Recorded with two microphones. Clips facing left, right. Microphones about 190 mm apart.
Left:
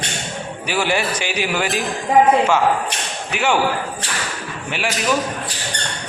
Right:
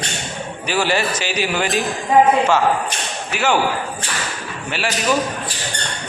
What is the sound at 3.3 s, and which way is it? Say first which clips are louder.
Speech: even; 15° left (ahead or behind).